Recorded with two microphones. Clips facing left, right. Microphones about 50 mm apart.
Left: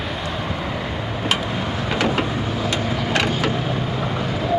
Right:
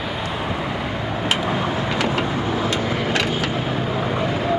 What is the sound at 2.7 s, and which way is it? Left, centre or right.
Vehicle, centre.